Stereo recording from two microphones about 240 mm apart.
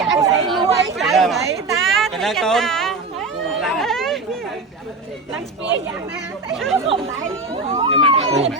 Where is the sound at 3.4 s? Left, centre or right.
Centre.